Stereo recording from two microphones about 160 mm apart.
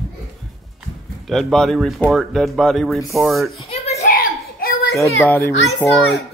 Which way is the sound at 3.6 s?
40° left (ahead or behind).